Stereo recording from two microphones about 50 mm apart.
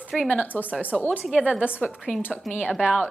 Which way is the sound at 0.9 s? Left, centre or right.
Centre.